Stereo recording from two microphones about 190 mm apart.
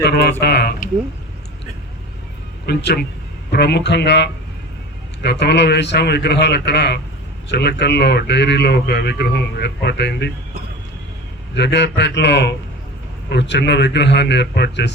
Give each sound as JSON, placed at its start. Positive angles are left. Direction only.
{"t": 0.0, "sound": "speech", "side_deg": 60}
{"t": 2.6, "sound": "speech", "side_deg": 60}
{"t": 11.5, "sound": "speech", "side_deg": 65}